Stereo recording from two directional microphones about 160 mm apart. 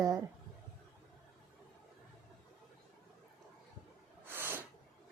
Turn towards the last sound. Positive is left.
turn(degrees=-15)  # may be behind; listen again after turning